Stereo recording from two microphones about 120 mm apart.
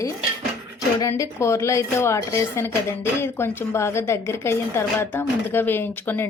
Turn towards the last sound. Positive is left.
turn(degrees=15)  # may be behind; listen again after turning